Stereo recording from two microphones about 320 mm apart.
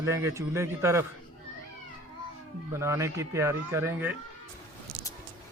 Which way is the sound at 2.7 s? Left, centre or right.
Centre.